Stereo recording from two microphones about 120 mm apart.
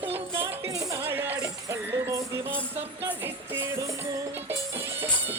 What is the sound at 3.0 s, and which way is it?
Jingle bell, 20° right (ahead or behind).